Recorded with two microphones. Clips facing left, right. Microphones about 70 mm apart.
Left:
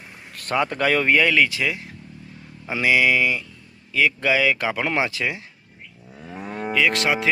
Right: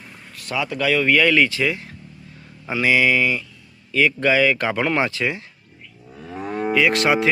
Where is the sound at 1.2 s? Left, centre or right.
Centre.